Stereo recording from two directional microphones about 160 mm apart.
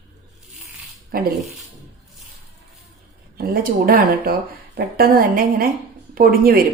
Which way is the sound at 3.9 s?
65° right (ahead or behind).